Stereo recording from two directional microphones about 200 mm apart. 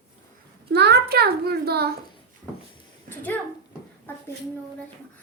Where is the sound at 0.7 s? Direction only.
55° right (ahead or behind).